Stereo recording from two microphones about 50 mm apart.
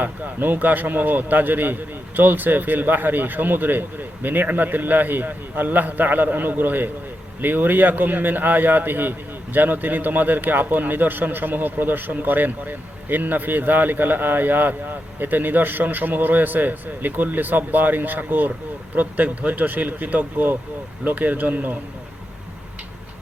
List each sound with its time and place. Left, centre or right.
0.0 s a man's voice: right